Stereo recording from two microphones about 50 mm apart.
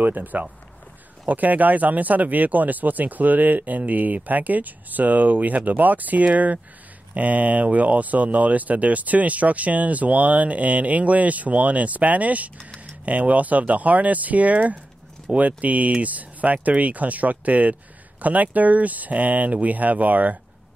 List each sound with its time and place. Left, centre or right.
0.0 s speech: right